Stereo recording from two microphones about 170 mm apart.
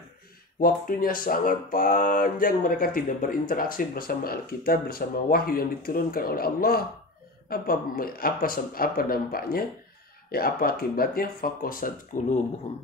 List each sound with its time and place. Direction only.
0.6 s speech: 55° left (ahead or behind)